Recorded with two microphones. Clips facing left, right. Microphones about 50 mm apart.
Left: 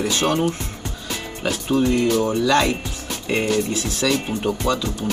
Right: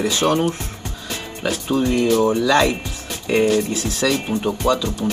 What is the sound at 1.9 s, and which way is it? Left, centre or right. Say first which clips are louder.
Speech: right 2 dB; right.